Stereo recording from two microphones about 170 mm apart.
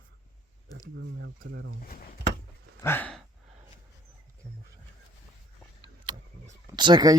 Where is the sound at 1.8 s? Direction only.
55° left (ahead or behind).